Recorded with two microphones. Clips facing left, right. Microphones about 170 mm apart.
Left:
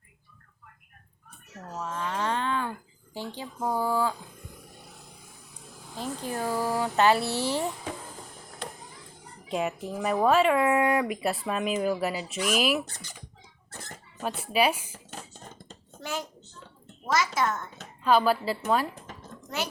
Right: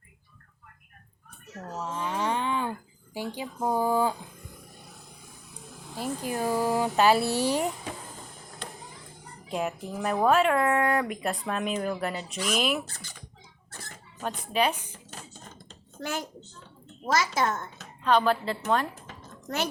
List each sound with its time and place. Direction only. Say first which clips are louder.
1.8 s speech: right 1 dB; 15° right (ahead or behind)
6.0 s speech: right 2 dB; 15° right (ahead or behind)
9.5 s speech: left 1 dB; centre (ahead or behind)
14.2 s speech: left 1 dB; 5° left (ahead or behind)
17.1 s a child's voice: right 1 dB; 35° right (ahead or behind)
18.0 s speech: left 1 dB; 5° left (ahead or behind)